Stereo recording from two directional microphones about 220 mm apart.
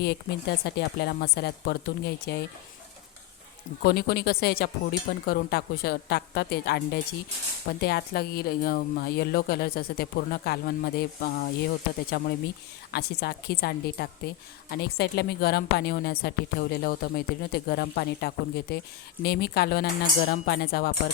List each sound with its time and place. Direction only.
0.0 s a woman's voice: 45° left (ahead or behind)
3.8 s a woman's voice: 45° left (ahead or behind)